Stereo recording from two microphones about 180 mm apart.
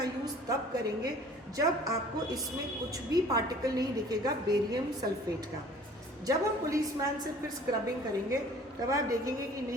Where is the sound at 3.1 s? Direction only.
20° right (ahead or behind).